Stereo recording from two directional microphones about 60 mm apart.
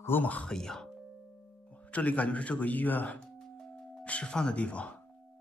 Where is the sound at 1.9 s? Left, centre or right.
Left.